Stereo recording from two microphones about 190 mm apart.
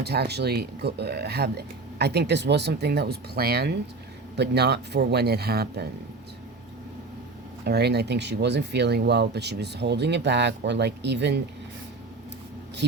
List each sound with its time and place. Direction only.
0.0 s speech: 60° right (ahead or behind)
7.6 s speech: 60° right (ahead or behind)